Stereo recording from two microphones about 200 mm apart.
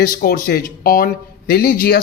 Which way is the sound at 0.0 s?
45° left (ahead or behind).